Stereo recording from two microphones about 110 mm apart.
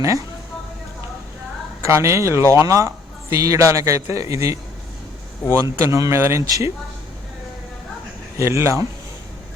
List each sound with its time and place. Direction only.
0.0 s a man's voice: 30° right (ahead or behind)
1.9 s a man's voice: 25° right (ahead or behind)
5.5 s a man's voice: 30° right (ahead or behind)
8.4 s a man's voice: 25° right (ahead or behind)